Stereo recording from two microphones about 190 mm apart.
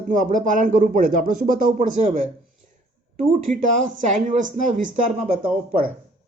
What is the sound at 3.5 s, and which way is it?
Speech, 45° right (ahead or behind).